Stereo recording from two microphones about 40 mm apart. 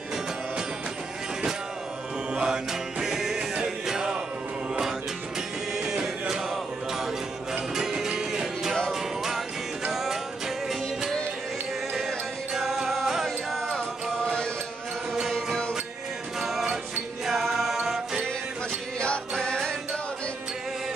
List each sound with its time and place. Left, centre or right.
2.3 s music: centre
2.7 s music: centre
5.8 s music: centre
12.5 s music: centre
14.2 s mantra: left
16.3 s music: centre